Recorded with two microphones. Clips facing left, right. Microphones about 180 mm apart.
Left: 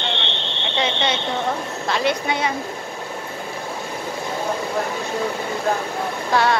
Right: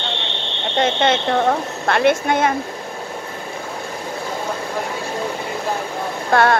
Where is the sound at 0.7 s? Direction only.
50° right (ahead or behind).